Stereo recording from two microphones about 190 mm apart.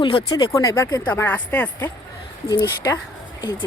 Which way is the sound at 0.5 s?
15° left (ahead or behind).